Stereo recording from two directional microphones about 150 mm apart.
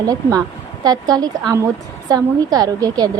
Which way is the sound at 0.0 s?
25° right (ahead or behind).